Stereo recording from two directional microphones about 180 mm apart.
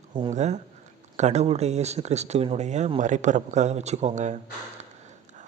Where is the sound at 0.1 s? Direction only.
25° right (ahead or behind).